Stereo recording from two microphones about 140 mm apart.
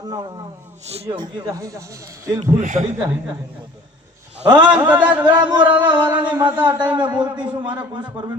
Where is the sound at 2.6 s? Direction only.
65° right (ahead or behind).